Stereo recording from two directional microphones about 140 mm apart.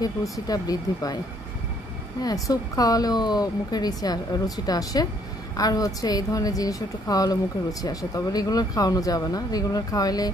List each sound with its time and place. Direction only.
0.0 s speech: 25° left (ahead or behind)
2.2 s speech: 25° left (ahead or behind)